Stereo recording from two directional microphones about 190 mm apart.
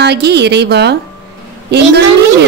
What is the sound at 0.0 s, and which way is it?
Speech, 60° right (ahead or behind).